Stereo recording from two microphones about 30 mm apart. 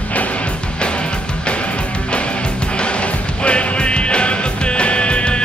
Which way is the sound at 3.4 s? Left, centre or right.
Left.